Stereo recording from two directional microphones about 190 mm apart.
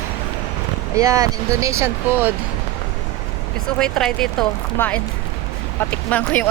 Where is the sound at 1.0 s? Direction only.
15° right (ahead or behind).